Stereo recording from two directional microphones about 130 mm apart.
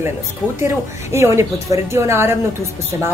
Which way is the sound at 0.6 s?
20° right (ahead or behind).